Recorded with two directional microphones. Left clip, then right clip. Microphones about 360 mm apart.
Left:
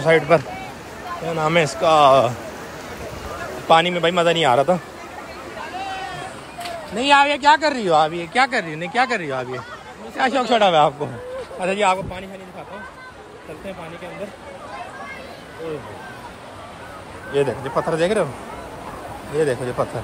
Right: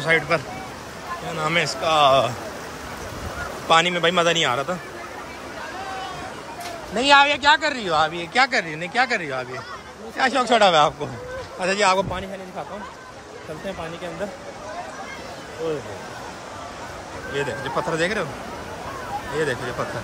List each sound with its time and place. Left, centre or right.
0.0 s speech: centre
3.6 s speech: centre
7.0 s speech: centre
17.4 s speech: centre
19.8 s speech: centre